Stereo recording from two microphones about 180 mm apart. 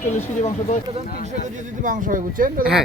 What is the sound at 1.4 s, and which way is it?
Speech, 45° right (ahead or behind).